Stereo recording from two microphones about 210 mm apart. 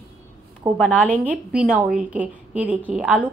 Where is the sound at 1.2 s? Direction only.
5° right (ahead or behind).